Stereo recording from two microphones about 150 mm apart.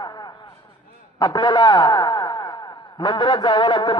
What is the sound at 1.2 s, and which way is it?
A man's voice, 25° left (ahead or behind).